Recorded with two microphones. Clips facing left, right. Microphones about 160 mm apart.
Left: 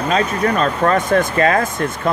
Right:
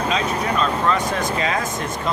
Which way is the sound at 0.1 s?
50° left (ahead or behind).